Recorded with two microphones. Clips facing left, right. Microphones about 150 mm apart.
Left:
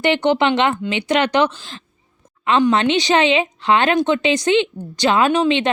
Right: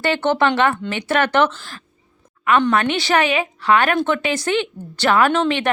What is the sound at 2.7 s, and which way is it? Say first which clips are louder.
Speech: left 2 dB; 20° left (ahead or behind).